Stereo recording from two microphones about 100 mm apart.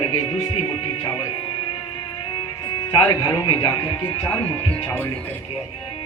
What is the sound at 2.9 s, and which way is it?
Speech, 45° left (ahead or behind).